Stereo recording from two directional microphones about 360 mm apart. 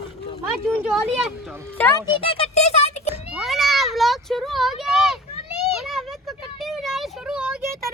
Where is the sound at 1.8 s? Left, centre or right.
Centre.